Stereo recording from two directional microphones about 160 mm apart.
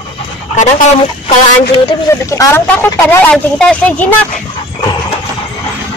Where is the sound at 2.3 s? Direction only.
20° left (ahead or behind).